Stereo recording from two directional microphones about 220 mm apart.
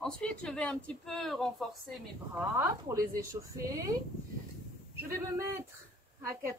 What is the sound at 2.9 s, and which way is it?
A woman's voice, 15° right (ahead or behind).